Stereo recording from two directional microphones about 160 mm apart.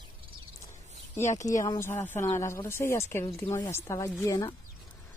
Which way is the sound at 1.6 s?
15° left (ahead or behind).